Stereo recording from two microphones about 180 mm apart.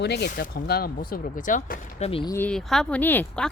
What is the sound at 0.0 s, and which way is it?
Speech, 65° left (ahead or behind).